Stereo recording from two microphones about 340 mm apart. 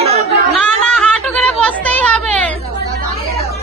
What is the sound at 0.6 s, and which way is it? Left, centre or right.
Chatter, centre.